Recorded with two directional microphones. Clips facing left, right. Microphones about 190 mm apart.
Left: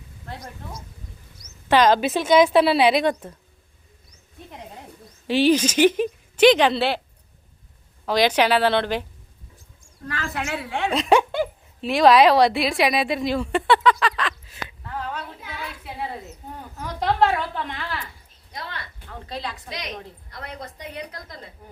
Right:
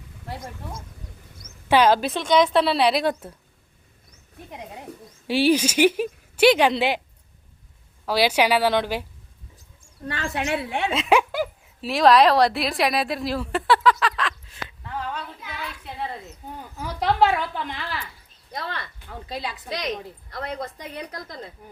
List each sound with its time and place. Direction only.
1.6 s a woman's voice: 10° right (ahead or behind)
2.0 s a woman's voice: 5° left (ahead or behind)
5.3 s speech: 10° right (ahead or behind)
8.0 s speech: 5° right (ahead or behind)
10.1 s a woman's voice: 25° right (ahead or behind)
10.8 s speech: centre (ahead or behind)
16.7 s a woman's voice: 5° right (ahead or behind)
19.3 s speech: 10° right (ahead or behind)